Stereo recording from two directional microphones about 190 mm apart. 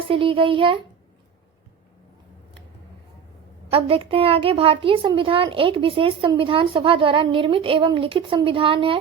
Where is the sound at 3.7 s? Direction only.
30° right (ahead or behind).